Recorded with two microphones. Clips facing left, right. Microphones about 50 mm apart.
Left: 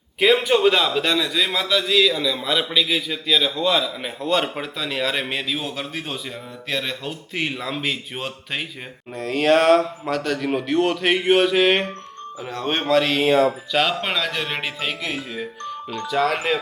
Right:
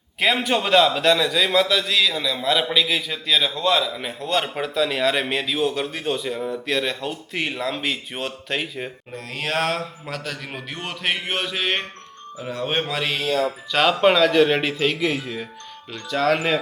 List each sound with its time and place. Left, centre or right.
0.2 s speech: centre